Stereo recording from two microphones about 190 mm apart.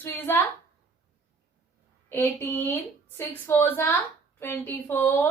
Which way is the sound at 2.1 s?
10° left (ahead or behind).